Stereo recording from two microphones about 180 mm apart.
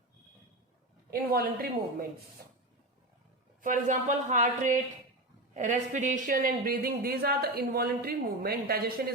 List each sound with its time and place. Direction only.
1.1 s speech: 55° right (ahead or behind)
3.6 s speech: 45° right (ahead or behind)